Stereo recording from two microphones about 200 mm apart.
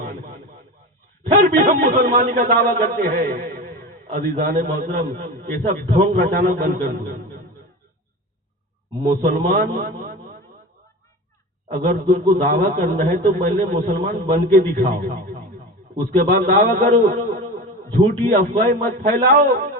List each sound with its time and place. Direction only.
1.3 s a man's voice: 40° right (ahead or behind)
9.0 s a man's voice: 40° right (ahead or behind)
11.7 s a man's voice: 45° right (ahead or behind)